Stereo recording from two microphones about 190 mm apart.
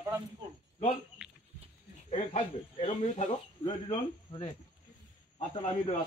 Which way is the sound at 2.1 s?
35° left (ahead or behind).